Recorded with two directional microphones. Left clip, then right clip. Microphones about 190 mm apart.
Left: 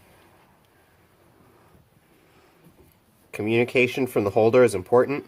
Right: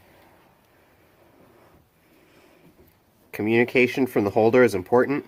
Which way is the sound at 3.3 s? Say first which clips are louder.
Right 1 dB; 15° right (ahead or behind).